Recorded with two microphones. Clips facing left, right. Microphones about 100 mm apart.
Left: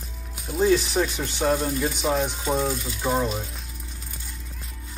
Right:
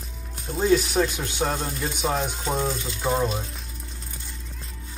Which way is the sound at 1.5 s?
5° left (ahead or behind).